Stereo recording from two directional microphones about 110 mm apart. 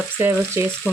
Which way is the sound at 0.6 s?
25° right (ahead or behind).